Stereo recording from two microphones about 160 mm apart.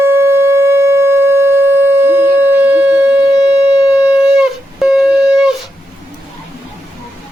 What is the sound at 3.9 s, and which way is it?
Shofar, 5° right (ahead or behind).